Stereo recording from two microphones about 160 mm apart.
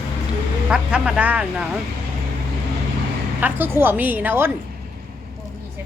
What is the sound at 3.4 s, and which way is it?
Speech, 15° right (ahead or behind).